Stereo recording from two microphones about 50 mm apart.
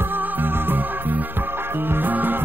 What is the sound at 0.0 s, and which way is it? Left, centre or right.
Music, right.